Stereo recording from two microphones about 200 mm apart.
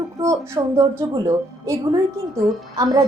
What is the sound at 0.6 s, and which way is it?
Speech, 20° right (ahead or behind).